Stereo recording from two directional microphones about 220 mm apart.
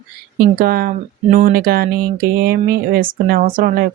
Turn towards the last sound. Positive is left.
turn(degrees=-40)  # may be behind; listen again after turning